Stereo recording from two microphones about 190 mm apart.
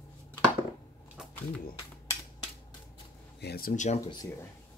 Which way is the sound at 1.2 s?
5° right (ahead or behind).